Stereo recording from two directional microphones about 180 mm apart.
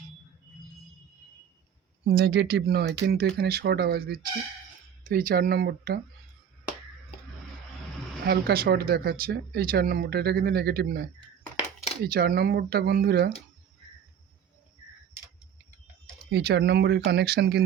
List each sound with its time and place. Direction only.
2.0 s speech: 60° right (ahead or behind)
8.2 s speech: 60° right (ahead or behind)
16.3 s speech: 65° right (ahead or behind)